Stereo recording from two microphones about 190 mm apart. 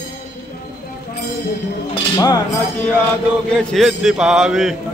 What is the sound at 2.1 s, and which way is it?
Speech, 20° left (ahead or behind).